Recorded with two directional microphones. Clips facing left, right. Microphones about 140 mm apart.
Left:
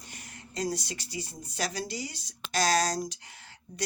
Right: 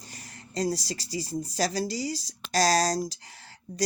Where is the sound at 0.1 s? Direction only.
35° right (ahead or behind).